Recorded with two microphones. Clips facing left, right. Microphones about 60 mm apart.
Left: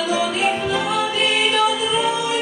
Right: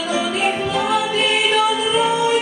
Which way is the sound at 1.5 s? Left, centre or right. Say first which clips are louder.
Right 2 dB; centre.